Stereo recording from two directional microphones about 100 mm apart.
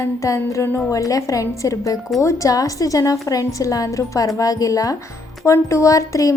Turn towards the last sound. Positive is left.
turn(degrees=35)  # may be behind; listen again after turning